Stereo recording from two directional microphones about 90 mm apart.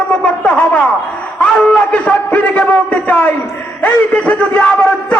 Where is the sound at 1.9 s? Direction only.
15° left (ahead or behind).